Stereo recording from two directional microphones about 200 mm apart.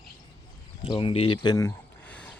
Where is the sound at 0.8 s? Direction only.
25° left (ahead or behind).